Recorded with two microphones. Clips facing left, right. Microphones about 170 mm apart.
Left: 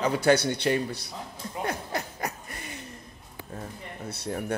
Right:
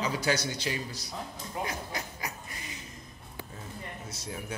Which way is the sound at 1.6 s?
55° left (ahead or behind).